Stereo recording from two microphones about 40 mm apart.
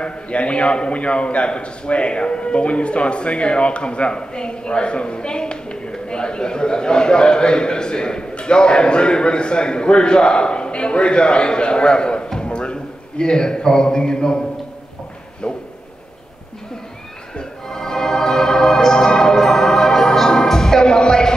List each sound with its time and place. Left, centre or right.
0.0 s a man's voice: left
15.4 s a sound: left
17.4 s music: centre